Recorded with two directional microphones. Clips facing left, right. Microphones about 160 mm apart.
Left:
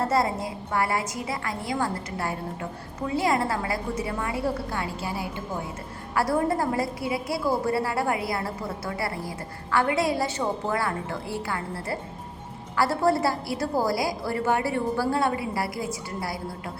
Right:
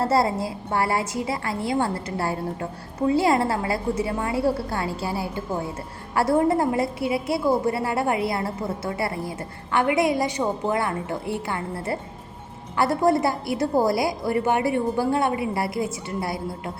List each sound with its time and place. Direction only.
0.0 s a woman's voice: 30° right (ahead or behind)
6.1 s a woman's voice: 25° right (ahead or behind)